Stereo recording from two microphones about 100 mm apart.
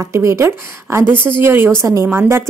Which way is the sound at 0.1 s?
30° right (ahead or behind).